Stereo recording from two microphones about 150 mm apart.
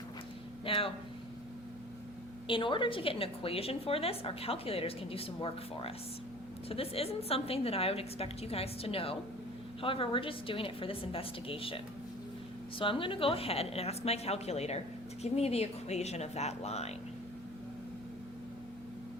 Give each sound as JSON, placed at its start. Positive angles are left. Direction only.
{"t": 0.6, "sound": "a sound", "side_deg": 35}
{"t": 2.5, "sound": "a woman's voice", "side_deg": 35}
{"t": 12.8, "sound": "a woman's voice", "side_deg": 35}